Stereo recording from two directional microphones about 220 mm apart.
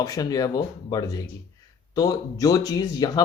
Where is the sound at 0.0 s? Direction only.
15° left (ahead or behind).